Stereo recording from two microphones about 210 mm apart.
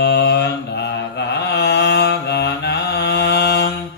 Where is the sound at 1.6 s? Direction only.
55° left (ahead or behind).